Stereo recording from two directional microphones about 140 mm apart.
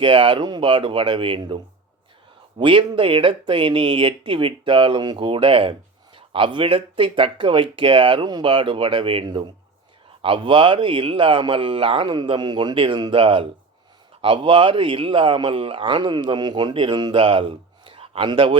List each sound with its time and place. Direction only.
0.0 s speech: 35° right (ahead or behind)